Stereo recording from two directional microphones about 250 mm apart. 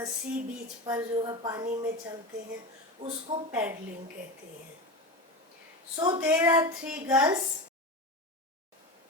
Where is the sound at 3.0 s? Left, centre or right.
Right.